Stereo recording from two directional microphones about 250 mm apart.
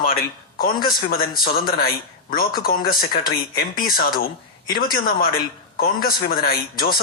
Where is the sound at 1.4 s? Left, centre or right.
Left.